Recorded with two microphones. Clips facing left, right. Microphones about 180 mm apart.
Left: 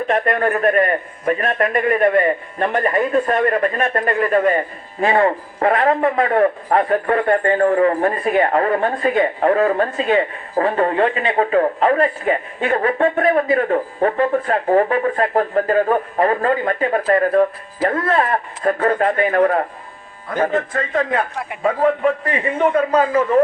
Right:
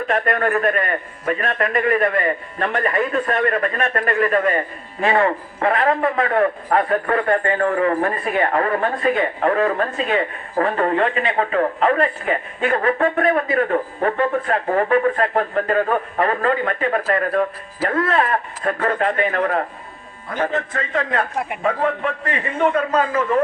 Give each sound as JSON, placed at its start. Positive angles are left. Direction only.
{"t": 0.1, "sound": "a man's voice", "side_deg": 30}
{"t": 21.6, "sound": "a man's voice", "side_deg": 20}